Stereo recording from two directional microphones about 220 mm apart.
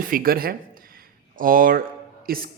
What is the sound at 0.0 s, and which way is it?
Speech, 40° right (ahead or behind).